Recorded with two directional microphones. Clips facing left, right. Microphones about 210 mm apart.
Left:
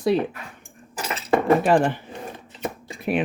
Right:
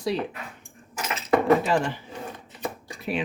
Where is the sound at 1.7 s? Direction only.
55° left (ahead or behind).